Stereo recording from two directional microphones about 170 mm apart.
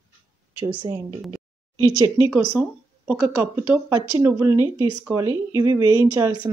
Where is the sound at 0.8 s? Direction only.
20° right (ahead or behind).